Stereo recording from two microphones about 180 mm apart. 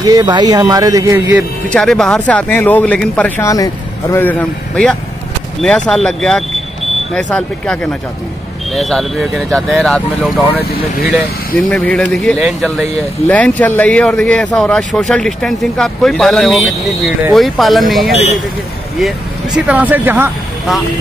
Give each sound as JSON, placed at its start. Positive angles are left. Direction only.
{"t": 0.0, "sound": "speech", "side_deg": -20}
{"t": 1.7, "sound": "speech", "side_deg": 5}